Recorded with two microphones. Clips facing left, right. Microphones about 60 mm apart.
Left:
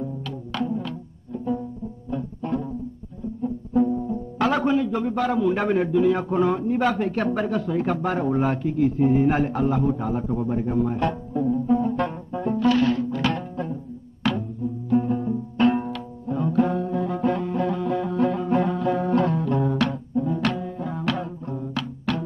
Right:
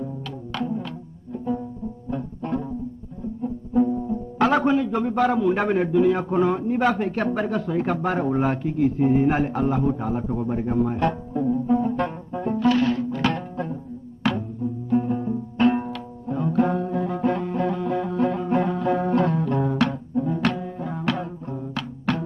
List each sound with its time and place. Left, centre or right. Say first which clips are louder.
0.0 s music: left 1 dB; right
2.0 s music: left 1 dB; right
4.1 s music: right 2 dB; right
4.9 s a man's voice: right 2 dB; right; by 7.5 s centre
7.5 s a man's voice: even; right
10.4 s a man's voice: right 1 dB; right
11.3 s a man's voice: even; centre
11.7 s music: even; centre; by 14.8 s right
15.0 s music: left 1 dB; centre
16.5 s music: right 1 dB; right
17.7 s music: even; centre